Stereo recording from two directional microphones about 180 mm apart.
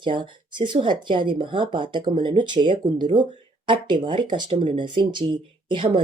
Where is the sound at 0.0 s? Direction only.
25° right (ahead or behind).